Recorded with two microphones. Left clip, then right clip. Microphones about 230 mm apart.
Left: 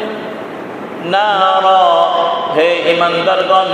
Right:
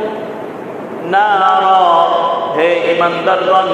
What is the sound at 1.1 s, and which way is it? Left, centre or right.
Mantra, left.